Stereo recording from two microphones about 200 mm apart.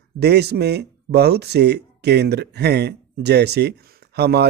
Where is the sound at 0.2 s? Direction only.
55° right (ahead or behind).